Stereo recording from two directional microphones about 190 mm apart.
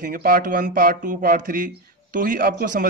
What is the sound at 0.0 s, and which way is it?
A man's voice, 50° right (ahead or behind).